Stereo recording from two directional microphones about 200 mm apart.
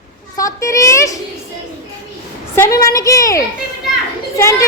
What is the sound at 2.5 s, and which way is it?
A child's voice, 15° left (ahead or behind).